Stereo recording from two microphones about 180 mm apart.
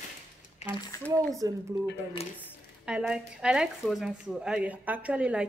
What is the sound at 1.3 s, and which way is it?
Speech, 20° right (ahead or behind).